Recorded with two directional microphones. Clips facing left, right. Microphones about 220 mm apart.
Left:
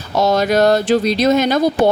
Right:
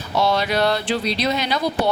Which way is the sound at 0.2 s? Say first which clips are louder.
Left 6 dB; 45° left (ahead or behind).